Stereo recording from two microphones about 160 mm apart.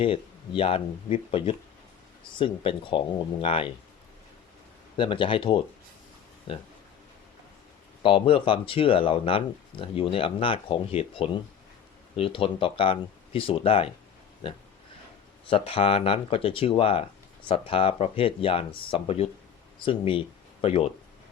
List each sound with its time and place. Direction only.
0.0 s speech: 35° left (ahead or behind)
4.9 s speech: 30° left (ahead or behind)
8.0 s speech: 35° left (ahead or behind)
15.4 s speech: 35° left (ahead or behind)